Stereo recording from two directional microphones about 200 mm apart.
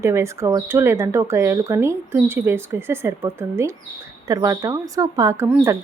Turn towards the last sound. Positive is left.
turn(degrees=-10)  # may be behind; listen again after turning